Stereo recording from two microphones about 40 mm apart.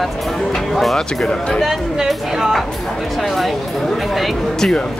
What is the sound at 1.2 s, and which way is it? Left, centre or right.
Speech, left.